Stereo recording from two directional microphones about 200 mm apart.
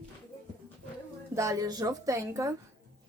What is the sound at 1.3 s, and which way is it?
Speech, 15° right (ahead or behind).